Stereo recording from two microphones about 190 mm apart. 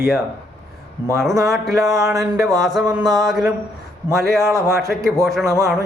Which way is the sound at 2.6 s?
Centre (ahead or behind).